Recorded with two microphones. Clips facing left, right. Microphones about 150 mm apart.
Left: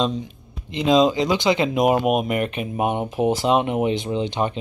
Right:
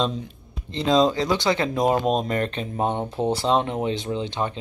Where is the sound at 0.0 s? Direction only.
Centre (ahead or behind).